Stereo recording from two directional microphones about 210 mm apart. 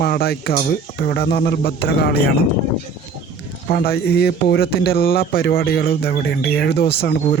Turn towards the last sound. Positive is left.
turn(degrees=50)  # may be behind; listen again after turning